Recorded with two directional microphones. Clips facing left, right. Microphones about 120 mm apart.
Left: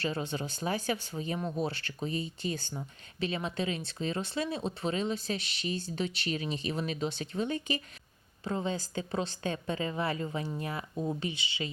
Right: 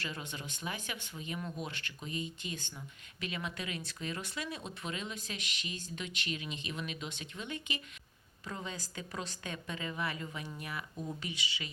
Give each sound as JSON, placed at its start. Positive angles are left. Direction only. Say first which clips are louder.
{"t": 0.0, "sound": "speech", "louder": "left 9 dB", "side_deg": 30}